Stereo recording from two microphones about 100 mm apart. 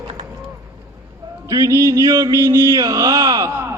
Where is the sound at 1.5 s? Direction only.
35° right (ahead or behind).